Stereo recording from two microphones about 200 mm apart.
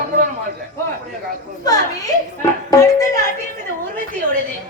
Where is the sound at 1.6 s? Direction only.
20° left (ahead or behind).